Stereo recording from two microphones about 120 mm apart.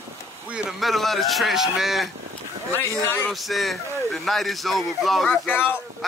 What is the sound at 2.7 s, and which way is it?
Speech, 15° left (ahead or behind).